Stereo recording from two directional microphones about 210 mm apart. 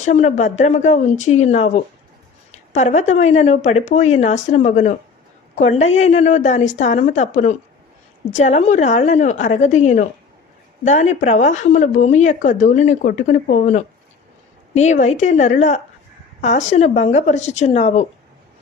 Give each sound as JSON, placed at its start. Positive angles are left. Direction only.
{"t": 0.0, "sound": "speech", "side_deg": 35}